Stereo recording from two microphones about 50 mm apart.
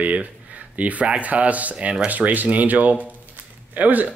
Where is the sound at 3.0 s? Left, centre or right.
Right.